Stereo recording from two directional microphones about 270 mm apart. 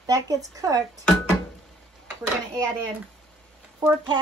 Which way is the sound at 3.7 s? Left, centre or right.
Centre.